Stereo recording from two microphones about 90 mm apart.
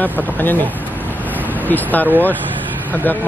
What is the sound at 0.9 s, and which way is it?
Vehicle, 20° right (ahead or behind).